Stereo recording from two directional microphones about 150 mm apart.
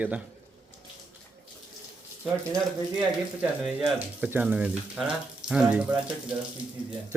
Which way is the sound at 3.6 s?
5° right (ahead or behind).